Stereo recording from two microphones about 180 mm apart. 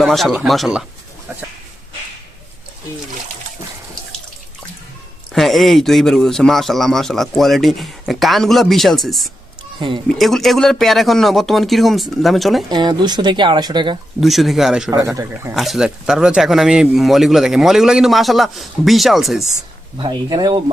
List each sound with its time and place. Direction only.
0.0 s speech: centre (ahead or behind)
5.3 s speech: centre (ahead or behind)
12.6 s speech: 25° right (ahead or behind)
14.2 s speech: centre (ahead or behind)
14.8 s speech: 15° right (ahead or behind)
15.5 s speech: centre (ahead or behind)
20.0 s speech: 25° right (ahead or behind)